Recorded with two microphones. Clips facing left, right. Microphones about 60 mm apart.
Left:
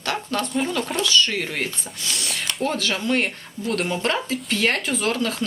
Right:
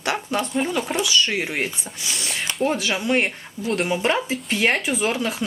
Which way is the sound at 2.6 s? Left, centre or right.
Centre.